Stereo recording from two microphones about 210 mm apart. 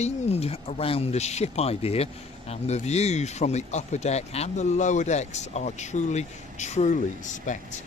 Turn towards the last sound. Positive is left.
turn(degrees=35)  # may be behind; listen again after turning